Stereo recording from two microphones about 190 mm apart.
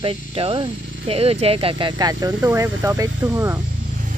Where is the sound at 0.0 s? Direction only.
30° right (ahead or behind); by 3.6 s 10° right (ahead or behind).